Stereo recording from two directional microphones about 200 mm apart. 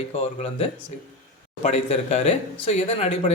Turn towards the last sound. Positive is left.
turn(degrees=30)  # may be behind; listen again after turning